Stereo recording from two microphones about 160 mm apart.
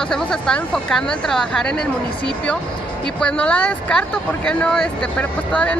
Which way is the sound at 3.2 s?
5° left (ahead or behind).